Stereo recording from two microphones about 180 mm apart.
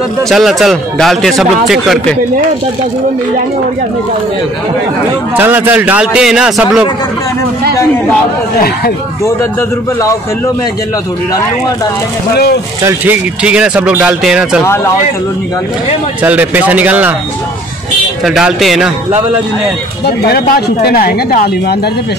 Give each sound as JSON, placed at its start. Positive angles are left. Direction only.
{"t": 0.3, "sound": "a man's voice", "side_deg": 0}
{"t": 5.3, "sound": "speech", "side_deg": -10}
{"t": 9.2, "sound": "a man's voice", "side_deg": 15}
{"t": 12.8, "sound": "speech", "side_deg": -10}
{"t": 16.2, "sound": "speech", "side_deg": -10}
{"t": 18.2, "sound": "a man's voice", "side_deg": 0}
{"t": 20.1, "sound": "speech", "side_deg": 60}